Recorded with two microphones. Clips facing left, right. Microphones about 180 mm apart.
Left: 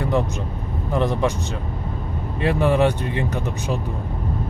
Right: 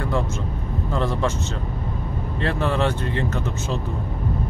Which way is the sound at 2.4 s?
15° left (ahead or behind).